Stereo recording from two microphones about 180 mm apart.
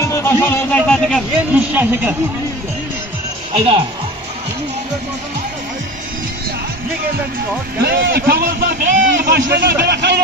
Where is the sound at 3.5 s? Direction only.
30° right (ahead or behind).